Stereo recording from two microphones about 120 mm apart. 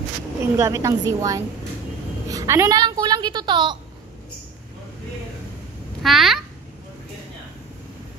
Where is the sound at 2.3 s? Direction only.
25° right (ahead or behind).